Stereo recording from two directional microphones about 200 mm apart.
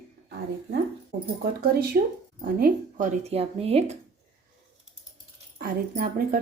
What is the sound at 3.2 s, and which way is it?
Speech, 30° right (ahead or behind).